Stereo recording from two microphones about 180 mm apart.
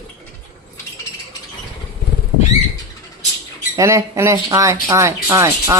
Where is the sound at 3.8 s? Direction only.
15° right (ahead or behind).